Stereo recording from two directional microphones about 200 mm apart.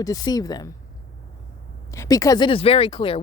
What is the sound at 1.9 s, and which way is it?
Speech, 15° left (ahead or behind).